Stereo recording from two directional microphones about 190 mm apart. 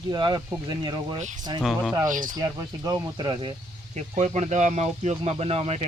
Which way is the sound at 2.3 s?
15° right (ahead or behind).